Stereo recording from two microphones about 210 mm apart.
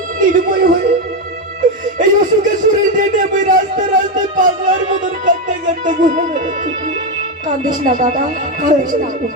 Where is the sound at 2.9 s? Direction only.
40° right (ahead or behind).